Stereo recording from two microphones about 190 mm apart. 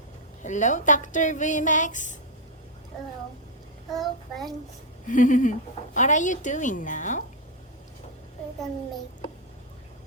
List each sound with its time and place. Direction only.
0.4 s speech: 40° left (ahead or behind)
3.8 s child singing: centre (ahead or behind)
5.0 s speech: 40° left (ahead or behind)